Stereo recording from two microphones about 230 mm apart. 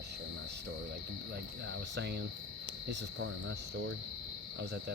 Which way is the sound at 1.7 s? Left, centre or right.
Right.